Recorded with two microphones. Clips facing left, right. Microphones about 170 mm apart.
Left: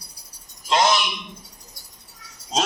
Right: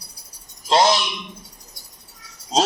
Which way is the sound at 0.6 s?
35° right (ahead or behind).